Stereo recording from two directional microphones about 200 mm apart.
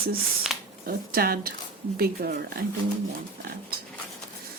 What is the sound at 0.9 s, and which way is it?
Speech, 50° right (ahead or behind).